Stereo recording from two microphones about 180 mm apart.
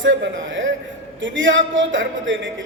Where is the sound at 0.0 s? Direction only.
90° right.